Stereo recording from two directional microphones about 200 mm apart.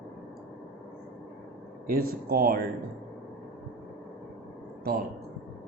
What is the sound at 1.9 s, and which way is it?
Speech, 50° right (ahead or behind).